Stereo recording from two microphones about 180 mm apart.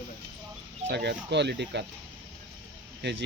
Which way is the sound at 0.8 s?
75° right (ahead or behind).